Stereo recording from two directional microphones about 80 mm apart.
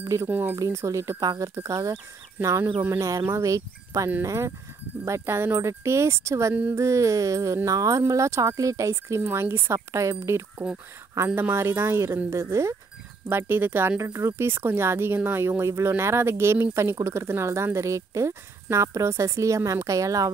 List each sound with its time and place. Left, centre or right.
0.0 s speech: right
0.3 s speech: right
0.6 s speech: right
2.6 s speech: right
3.3 s speech: right
6.7 s music: right
8.1 s speech: right
13.3 s speech: right